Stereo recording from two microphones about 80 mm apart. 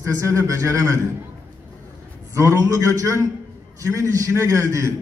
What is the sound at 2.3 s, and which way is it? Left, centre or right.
A man's voice, right.